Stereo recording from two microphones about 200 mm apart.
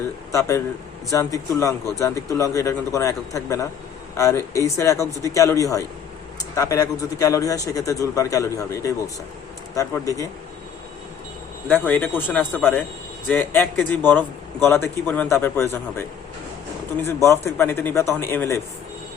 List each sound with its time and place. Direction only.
0.3 s a man's voice: 15° left (ahead or behind)
11.7 s a man's voice: 10° left (ahead or behind)
17.6 s a man's voice: 10° left (ahead or behind)